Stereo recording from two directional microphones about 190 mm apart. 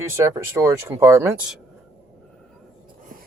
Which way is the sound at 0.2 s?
15° right (ahead or behind).